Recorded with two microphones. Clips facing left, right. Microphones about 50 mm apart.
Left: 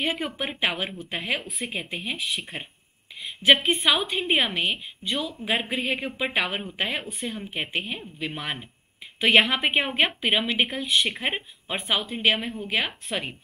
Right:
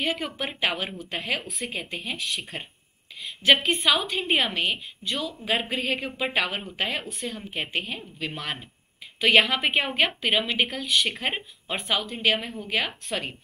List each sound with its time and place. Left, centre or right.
0.0 s a woman's voice: centre